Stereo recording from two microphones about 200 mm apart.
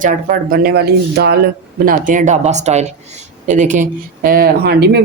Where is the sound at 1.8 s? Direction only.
40° right (ahead or behind).